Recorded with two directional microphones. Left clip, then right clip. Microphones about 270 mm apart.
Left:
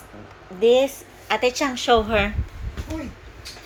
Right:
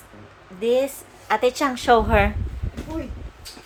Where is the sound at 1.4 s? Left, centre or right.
Centre.